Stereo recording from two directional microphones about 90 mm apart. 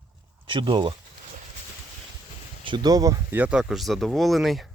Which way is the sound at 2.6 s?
55° right (ahead or behind).